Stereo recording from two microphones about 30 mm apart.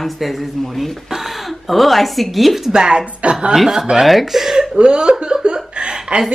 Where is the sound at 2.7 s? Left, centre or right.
Right.